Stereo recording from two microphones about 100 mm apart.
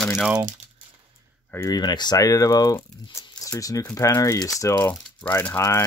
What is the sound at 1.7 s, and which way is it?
Speech, 45° left (ahead or behind).